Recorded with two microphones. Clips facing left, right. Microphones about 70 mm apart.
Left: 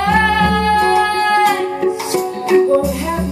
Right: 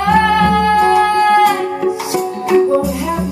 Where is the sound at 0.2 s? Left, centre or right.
Centre.